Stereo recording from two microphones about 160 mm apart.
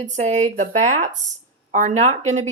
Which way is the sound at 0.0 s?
45° right (ahead or behind).